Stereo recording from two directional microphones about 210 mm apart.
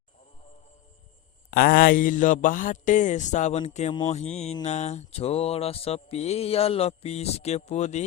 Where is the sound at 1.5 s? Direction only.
45° left (ahead or behind).